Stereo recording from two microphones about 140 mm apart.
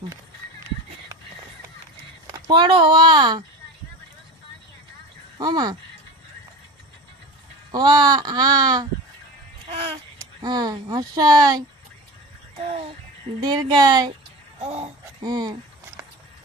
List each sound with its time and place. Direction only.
2.2 s speech: 30° right (ahead or behind)
5.4 s speech: 30° right (ahead or behind)
7.7 s speech: 30° right (ahead or behind)
10.4 s speech: 30° right (ahead or behind)
12.6 s a sound: 45° right (ahead or behind)
13.4 s speech: 30° right (ahead or behind)
14.6 s speech: 45° right (ahead or behind)
15.2 s speech: 30° right (ahead or behind)